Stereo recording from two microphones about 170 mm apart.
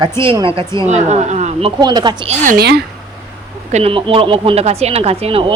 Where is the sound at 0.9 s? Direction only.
40° right (ahead or behind); by 2.3 s 25° right (ahead or behind).